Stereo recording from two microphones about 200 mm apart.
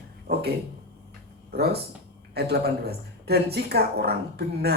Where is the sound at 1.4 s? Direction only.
50° right (ahead or behind).